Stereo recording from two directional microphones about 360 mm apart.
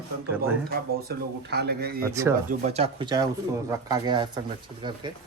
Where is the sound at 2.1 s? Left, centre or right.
Centre.